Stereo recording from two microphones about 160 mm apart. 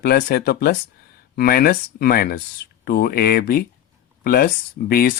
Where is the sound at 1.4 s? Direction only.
70° left (ahead or behind).